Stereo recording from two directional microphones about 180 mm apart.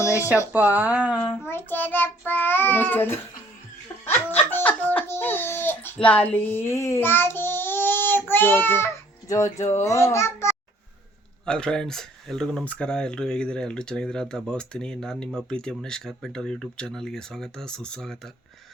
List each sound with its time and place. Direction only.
0.5 s speech: 10° right (ahead or behind)
1.2 s child singing: 15° left (ahead or behind)
4.0 s giggle: 10° left (ahead or behind)
6.1 s child singing: 10° left (ahead or behind)
11.4 s speech: 5° left (ahead or behind)